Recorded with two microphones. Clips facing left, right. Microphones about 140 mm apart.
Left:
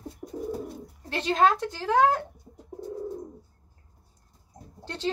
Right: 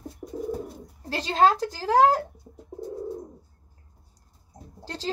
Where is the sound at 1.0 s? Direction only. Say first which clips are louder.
Right 1 dB; 35° right (ahead or behind).